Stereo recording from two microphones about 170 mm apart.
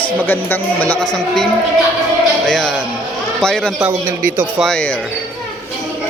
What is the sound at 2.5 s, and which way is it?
A man's voice, centre (ahead or behind).